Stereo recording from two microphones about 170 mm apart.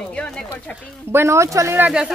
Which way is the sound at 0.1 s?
5° left (ahead or behind).